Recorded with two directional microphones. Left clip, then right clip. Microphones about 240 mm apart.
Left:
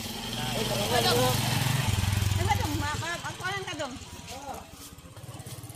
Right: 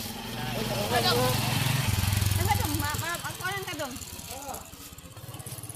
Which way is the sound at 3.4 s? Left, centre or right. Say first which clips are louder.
Even; centre.